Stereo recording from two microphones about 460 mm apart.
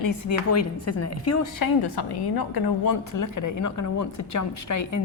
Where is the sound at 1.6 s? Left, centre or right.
Left.